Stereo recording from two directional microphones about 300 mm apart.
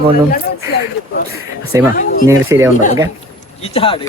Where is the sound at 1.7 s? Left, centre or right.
Centre.